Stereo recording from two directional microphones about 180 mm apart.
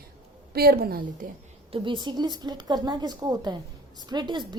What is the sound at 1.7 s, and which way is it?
A woman's voice, 25° right (ahead or behind).